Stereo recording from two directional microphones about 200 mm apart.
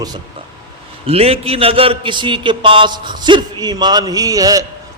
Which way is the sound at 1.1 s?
30° right (ahead or behind).